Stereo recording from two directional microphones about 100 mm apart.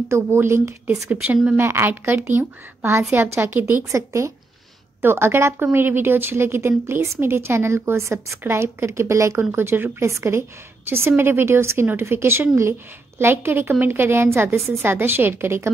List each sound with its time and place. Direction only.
0.1 s a woman's voice: 25° right (ahead or behind)
1.2 s a woman's voice: 10° right (ahead or behind)
1.6 s a woman's voice: 25° right (ahead or behind)